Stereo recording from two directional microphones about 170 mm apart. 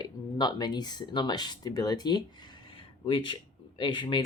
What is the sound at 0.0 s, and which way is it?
Speech, 25° left (ahead or behind).